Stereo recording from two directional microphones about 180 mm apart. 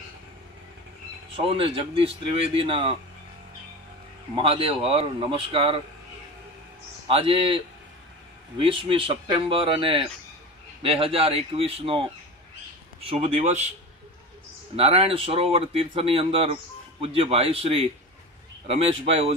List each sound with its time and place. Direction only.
1.3 s speech: 30° right (ahead or behind)
4.4 s speech: 30° right (ahead or behind)
7.1 s speech: 30° right (ahead or behind)
13.1 s speech: 35° right (ahead or behind)
14.8 s speech: 35° right (ahead or behind)